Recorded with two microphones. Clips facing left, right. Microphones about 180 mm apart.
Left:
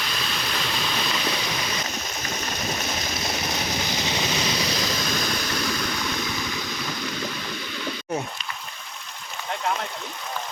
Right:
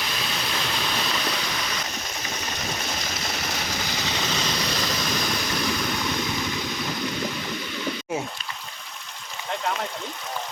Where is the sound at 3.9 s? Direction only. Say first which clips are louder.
Left 2 dB; 15° left (ahead or behind).